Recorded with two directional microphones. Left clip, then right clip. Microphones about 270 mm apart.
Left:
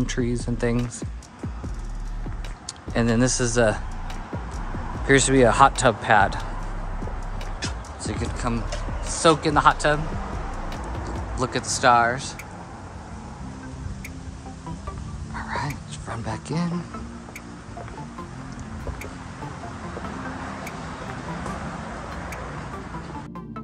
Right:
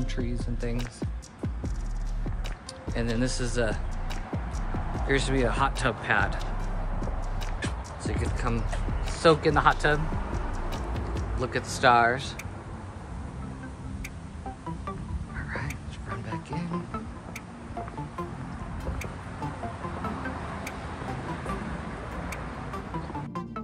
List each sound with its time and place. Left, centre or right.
0.0 s speech: left
2.9 s speech: left
5.0 s speech: left
8.0 s speech: centre
11.3 s speech: centre
15.3 s a sound: centre
16.3 s wild animals: centre